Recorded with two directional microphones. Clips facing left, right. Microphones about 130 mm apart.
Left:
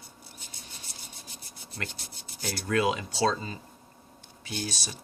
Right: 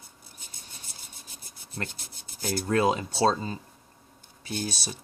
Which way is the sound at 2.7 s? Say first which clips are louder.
Right 2 dB; 35° right (ahead or behind).